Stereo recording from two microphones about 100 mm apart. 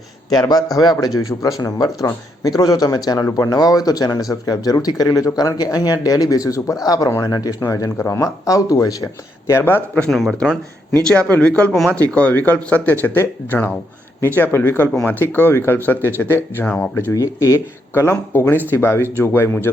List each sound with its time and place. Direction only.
0.3 s speech: 40° left (ahead or behind)
9.5 s speech: 25° left (ahead or behind)
10.1 s speech: centre (ahead or behind)
10.9 s speech: 10° left (ahead or behind)
17.1 s speech: 35° left (ahead or behind)